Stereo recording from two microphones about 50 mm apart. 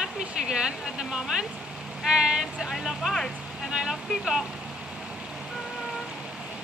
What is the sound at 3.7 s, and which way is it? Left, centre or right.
Speech, centre.